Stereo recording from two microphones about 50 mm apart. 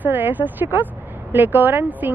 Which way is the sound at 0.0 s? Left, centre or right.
Right.